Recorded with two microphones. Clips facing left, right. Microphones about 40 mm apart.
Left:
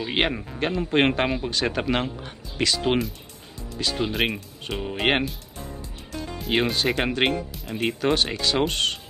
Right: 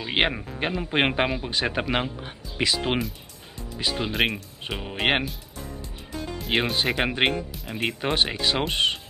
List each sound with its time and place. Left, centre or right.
0.0 s speech: centre
5.6 s music: left
6.4 s speech: centre
7.5 s music: centre
8.0 s speech: centre